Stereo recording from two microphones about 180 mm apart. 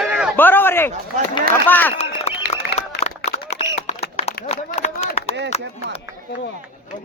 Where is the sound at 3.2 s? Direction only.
40° left (ahead or behind).